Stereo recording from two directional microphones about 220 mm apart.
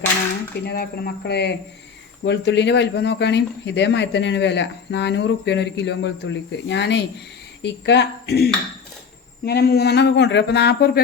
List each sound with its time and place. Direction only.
0.6 s speech: 45° left (ahead or behind)